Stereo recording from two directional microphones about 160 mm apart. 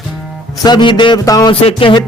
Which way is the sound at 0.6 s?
30° left (ahead or behind).